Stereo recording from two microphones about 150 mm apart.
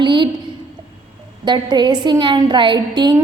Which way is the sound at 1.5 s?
30° right (ahead or behind).